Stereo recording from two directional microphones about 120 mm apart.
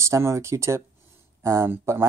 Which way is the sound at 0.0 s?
25° right (ahead or behind).